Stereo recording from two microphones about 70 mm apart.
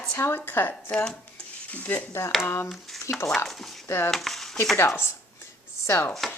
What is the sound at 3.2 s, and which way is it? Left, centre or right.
Speech, centre.